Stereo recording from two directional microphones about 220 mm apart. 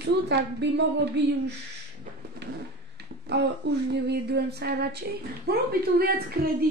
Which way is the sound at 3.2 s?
50° right (ahead or behind).